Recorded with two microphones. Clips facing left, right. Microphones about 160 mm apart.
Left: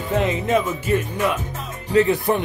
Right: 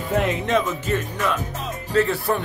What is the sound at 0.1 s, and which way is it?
Speech, centre (ahead or behind).